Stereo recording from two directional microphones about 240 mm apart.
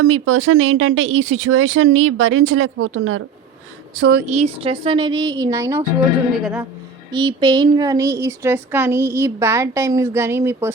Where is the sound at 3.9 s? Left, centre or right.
Right.